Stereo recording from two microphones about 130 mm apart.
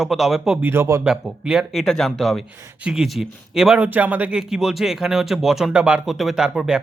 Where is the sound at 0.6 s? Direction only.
20° right (ahead or behind).